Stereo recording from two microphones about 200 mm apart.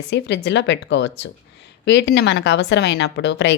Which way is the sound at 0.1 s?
60° left (ahead or behind).